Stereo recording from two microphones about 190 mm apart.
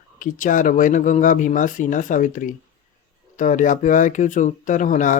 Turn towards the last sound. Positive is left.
turn(degrees=40)  # may be behind; listen again after turning